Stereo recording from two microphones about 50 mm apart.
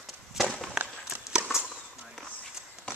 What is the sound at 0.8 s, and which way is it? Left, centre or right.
Walk, centre.